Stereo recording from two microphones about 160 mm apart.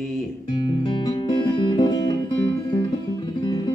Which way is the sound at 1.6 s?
25° left (ahead or behind).